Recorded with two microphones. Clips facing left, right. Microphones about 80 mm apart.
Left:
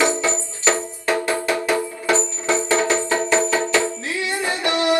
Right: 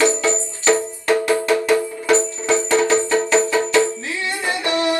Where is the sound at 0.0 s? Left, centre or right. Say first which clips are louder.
Right 2 dB; left.